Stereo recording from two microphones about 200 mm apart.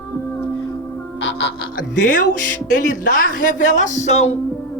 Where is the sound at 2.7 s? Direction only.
45° left (ahead or behind).